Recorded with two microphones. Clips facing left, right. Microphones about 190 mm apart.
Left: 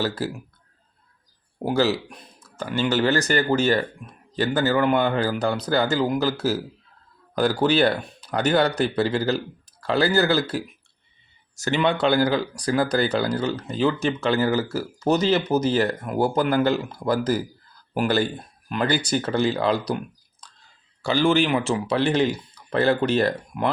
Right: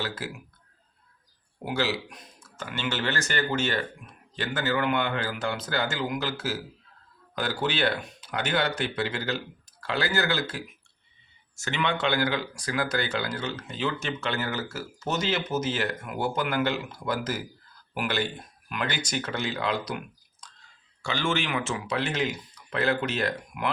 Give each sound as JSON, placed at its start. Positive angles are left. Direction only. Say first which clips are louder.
{"t": 0.2, "sound": "speech", "louder": "left 8 dB", "side_deg": 40}
{"t": 1.5, "sound": "speech", "louder": "left 7 dB", "side_deg": 40}
{"t": 21.0, "sound": "speech", "louder": "left 9 dB", "side_deg": 35}